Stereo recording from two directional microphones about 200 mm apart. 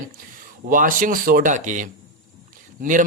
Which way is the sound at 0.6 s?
45° right (ahead or behind).